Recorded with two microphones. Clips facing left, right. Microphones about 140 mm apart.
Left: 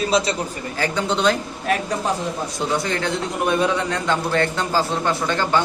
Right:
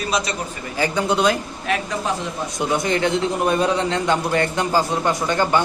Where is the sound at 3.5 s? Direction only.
35° right (ahead or behind).